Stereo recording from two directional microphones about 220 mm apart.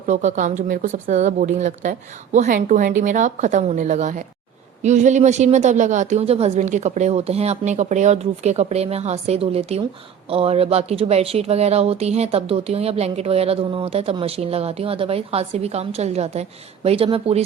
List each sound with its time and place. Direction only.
0.1 s speech: 35° right (ahead or behind)